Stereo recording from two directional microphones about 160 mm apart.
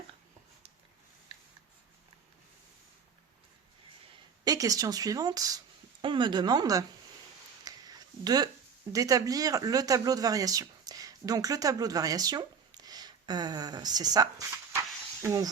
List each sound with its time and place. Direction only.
4.4 s speech: 20° right (ahead or behind)
7.6 s a sound: 25° right (ahead or behind)
8.9 s speech: 20° right (ahead or behind)